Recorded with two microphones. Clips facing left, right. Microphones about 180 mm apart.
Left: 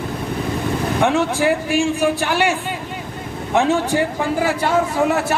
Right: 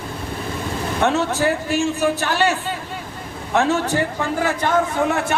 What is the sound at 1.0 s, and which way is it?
A man's voice, 15° left (ahead or behind).